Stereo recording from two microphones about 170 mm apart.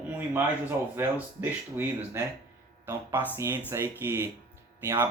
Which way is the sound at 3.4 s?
15° right (ahead or behind).